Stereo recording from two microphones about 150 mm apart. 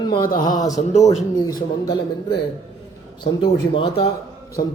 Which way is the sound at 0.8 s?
50° left (ahead or behind).